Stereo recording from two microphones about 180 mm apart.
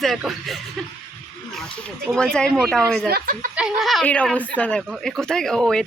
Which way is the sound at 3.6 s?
Centre (ahead or behind).